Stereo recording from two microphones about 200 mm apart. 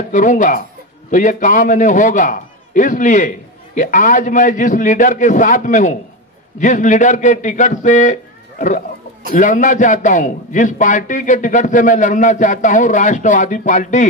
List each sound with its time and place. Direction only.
0.1 s a man's voice: 40° left (ahead or behind)